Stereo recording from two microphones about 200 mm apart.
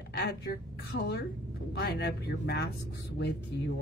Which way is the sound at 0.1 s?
55° left (ahead or behind).